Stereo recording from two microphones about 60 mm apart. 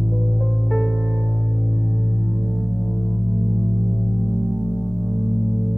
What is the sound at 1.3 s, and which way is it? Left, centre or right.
Music, centre.